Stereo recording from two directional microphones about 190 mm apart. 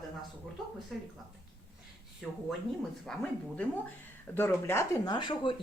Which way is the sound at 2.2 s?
Centre (ahead or behind).